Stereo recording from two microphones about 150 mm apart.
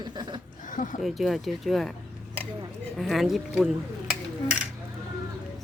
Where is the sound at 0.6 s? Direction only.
60° left (ahead or behind).